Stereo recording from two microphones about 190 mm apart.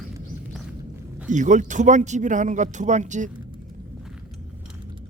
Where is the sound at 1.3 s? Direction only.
40° right (ahead or behind).